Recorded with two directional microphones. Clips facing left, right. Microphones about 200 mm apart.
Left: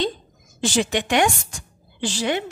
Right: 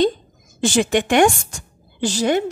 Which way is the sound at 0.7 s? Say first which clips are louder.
Right 4 dB; 50° right (ahead or behind).